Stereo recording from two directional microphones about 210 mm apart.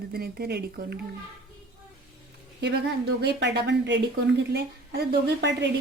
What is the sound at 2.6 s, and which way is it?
A woman's voice, 55° right (ahead or behind).